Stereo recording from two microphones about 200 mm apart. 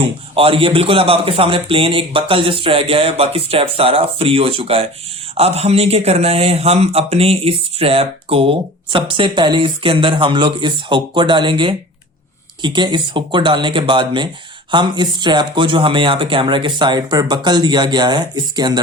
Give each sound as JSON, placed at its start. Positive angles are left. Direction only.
{"t": 0.3, "sound": "speech", "side_deg": -25}